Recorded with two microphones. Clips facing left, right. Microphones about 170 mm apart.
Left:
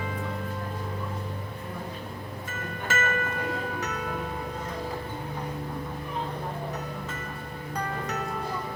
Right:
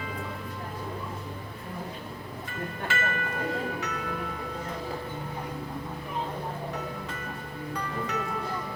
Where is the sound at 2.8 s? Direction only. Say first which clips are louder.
Left 3 dB; 45° left (ahead or behind).